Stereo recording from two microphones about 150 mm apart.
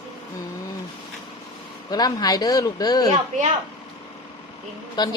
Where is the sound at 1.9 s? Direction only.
25° left (ahead or behind).